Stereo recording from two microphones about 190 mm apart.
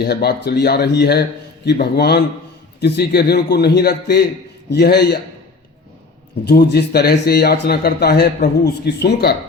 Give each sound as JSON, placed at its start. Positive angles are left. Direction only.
{"t": 0.0, "sound": "speech", "side_deg": 60}
{"t": 6.4, "sound": "speech", "side_deg": 60}